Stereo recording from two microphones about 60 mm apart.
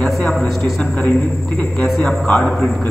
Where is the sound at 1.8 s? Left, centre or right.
Centre.